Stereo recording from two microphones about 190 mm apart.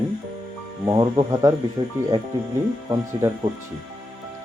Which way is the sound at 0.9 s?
20° right (ahead or behind).